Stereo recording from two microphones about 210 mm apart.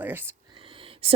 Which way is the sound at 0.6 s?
25° right (ahead or behind).